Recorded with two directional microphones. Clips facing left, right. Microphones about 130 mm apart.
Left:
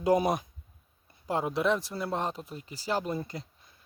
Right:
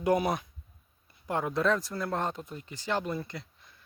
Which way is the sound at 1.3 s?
30° left (ahead or behind).